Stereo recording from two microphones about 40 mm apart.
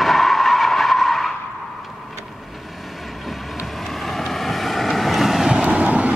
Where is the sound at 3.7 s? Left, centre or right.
Centre.